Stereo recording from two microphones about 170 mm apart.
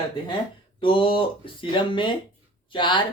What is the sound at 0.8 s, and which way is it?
Speech, 30° left (ahead or behind).